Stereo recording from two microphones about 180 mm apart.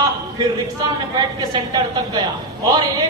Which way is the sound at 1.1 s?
20° right (ahead or behind).